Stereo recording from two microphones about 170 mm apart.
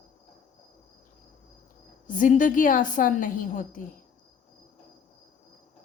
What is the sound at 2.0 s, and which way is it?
A woman's voice, 50° left (ahead or behind).